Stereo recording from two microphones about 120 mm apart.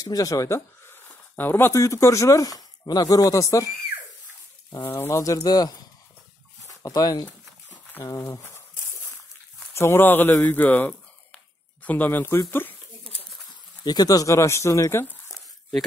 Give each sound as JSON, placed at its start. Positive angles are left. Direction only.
{"t": 0.0, "sound": "speech", "side_deg": 30}
{"t": 4.7, "sound": "speech", "side_deg": 20}
{"t": 9.8, "sound": "speech", "side_deg": 20}
{"t": 13.5, "sound": "speech", "side_deg": 35}